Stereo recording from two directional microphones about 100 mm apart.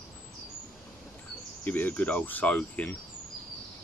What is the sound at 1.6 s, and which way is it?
Speech, 20° left (ahead or behind).